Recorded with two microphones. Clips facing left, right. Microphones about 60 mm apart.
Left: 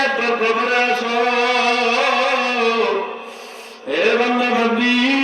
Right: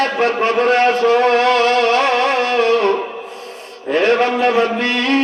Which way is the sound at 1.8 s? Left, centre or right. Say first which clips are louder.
Right 3 dB; right.